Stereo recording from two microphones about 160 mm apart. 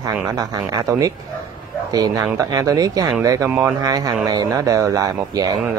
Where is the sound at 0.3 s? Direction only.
25° right (ahead or behind).